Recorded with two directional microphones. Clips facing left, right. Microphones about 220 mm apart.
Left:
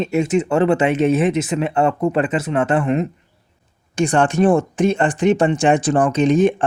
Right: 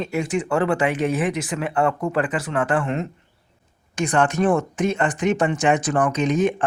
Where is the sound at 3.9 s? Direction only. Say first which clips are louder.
Left 4 dB; 30° left (ahead or behind).